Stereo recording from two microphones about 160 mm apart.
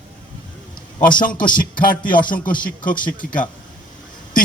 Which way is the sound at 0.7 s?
60° left (ahead or behind).